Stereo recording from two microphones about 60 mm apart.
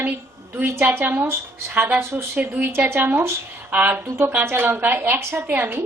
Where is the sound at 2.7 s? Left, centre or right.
Right.